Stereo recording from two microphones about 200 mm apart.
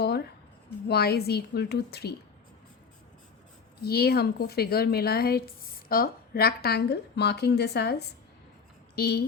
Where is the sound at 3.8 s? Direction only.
50° left (ahead or behind).